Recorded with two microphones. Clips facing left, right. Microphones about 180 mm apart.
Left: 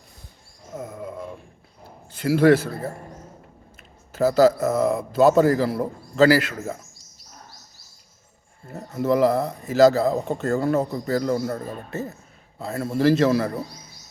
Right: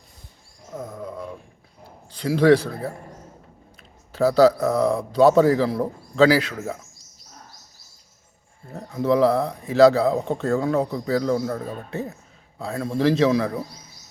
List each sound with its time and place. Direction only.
0.7 s a sound: 10° left (ahead or behind)
2.1 s speech: 5° left (ahead or behind)
4.1 s speech: centre (ahead or behind)
8.7 s speech: 5° left (ahead or behind)